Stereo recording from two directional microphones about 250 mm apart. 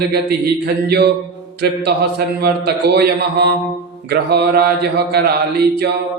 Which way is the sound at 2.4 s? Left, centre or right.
Right.